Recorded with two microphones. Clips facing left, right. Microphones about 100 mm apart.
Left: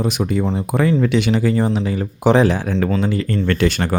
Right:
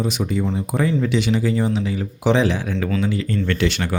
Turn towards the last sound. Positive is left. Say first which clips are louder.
# left 4 dB
turn(degrees=45)  # may be behind; listen again after turning